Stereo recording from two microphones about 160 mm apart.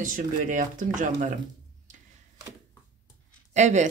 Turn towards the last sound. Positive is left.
turn(degrees=-50)  # may be behind; listen again after turning